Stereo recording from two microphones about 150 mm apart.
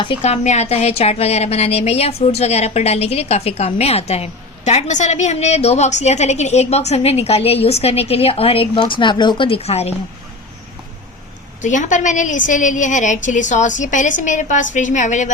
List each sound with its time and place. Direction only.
0.0 s a woman's voice: 40° left (ahead or behind)
11.6 s a woman's voice: 55° left (ahead or behind)